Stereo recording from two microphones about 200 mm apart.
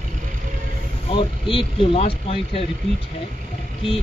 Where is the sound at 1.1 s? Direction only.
25° left (ahead or behind).